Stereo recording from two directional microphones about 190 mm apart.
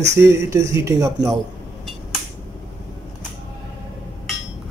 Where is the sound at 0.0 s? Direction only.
15° right (ahead or behind).